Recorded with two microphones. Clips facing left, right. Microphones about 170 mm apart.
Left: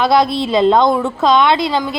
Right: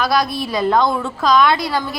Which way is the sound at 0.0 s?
25° left (ahead or behind).